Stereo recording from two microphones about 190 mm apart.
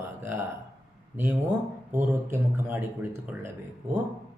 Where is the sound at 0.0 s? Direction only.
15° right (ahead or behind).